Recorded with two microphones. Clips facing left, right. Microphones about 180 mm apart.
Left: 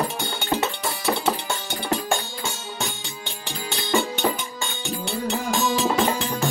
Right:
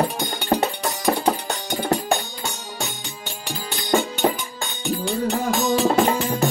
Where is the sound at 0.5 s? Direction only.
45° right (ahead or behind).